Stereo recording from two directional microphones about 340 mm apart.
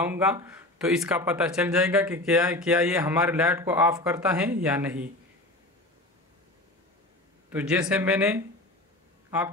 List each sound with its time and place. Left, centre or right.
0.0 s speech: centre
7.4 s speech: centre